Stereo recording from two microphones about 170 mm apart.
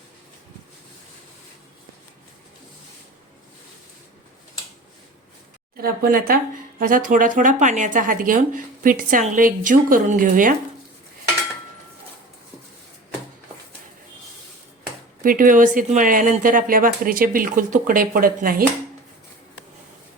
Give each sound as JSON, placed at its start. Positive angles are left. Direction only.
{"t": 5.7, "sound": "speech", "side_deg": -60}
{"t": 15.2, "sound": "speech", "side_deg": -55}